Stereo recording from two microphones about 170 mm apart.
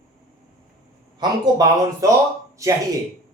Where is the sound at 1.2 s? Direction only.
25° right (ahead or behind).